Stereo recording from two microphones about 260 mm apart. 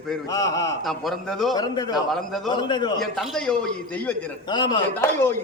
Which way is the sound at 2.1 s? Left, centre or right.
Centre.